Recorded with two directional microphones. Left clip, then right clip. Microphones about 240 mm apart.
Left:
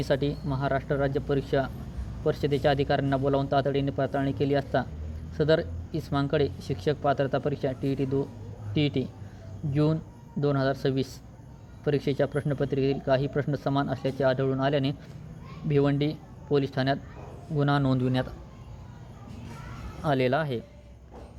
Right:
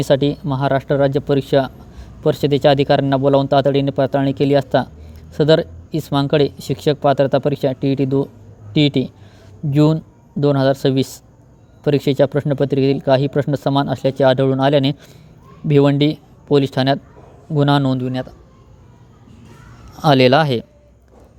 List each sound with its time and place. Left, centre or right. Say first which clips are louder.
0.0 s speech: right 11 dB; right
20.0 s speech: right 14 dB; right